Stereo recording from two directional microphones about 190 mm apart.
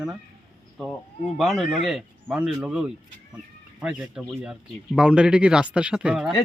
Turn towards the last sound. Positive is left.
turn(degrees=-5)  # may be behind; listen again after turning